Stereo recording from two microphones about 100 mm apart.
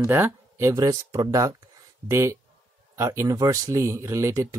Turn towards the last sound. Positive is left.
turn(degrees=-30)  # may be behind; listen again after turning